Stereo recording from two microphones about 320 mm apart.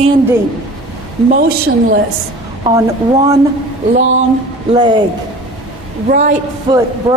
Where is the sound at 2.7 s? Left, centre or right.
Centre.